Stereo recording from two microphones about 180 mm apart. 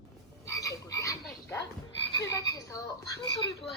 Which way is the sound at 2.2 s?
20° left (ahead or behind).